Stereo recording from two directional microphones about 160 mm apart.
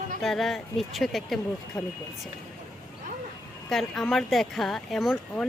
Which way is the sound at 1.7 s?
20° left (ahead or behind).